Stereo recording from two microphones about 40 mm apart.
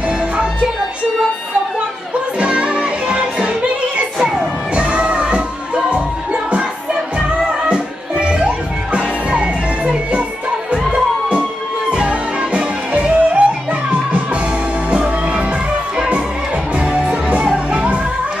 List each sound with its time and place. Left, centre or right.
2.3 s music: right
14.9 s music: right
16.7 s music: right
17.6 s music: right